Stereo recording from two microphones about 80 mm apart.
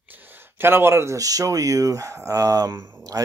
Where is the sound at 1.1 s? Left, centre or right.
Right.